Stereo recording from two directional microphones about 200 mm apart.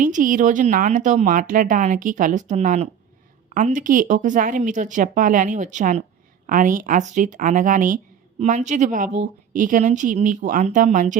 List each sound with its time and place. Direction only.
0.0 s speech: 40° right (ahead or behind)